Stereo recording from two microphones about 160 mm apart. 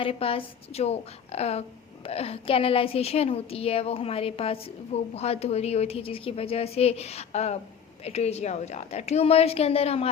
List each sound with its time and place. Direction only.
0.0 s a woman's voice: 35° left (ahead or behind)